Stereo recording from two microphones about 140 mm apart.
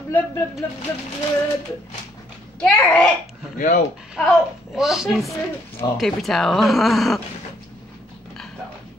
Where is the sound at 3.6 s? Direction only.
70° left (ahead or behind).